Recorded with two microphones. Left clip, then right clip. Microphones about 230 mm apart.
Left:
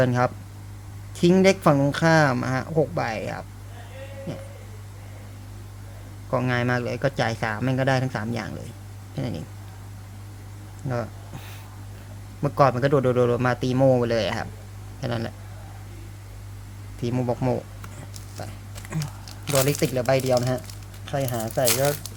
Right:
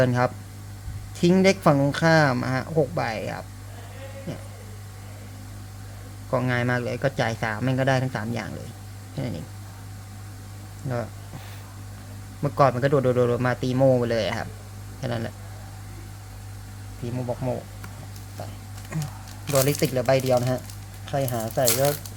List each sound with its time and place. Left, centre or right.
0.0 s speech: centre
6.3 s a man's voice: centre
12.4 s a man's voice: centre
17.1 s speech: left
18.9 s a man's voice: centre